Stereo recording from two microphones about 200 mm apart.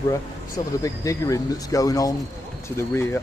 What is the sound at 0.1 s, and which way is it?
Speech, 15° left (ahead or behind).